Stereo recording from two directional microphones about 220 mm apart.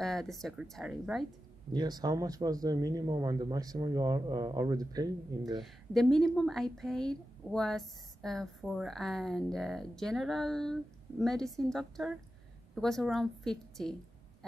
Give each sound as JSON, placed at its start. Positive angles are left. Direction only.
{"t": 0.0, "sound": "a woman's voice", "side_deg": 0}
{"t": 1.7, "sound": "speech", "side_deg": -20}
{"t": 5.6, "sound": "a woman's voice", "side_deg": 0}